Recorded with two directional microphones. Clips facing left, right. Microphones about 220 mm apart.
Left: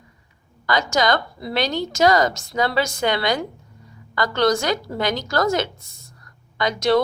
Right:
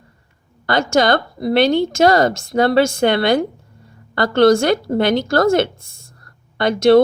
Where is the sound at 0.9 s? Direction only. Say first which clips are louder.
Right 6 dB; 55° right (ahead or behind).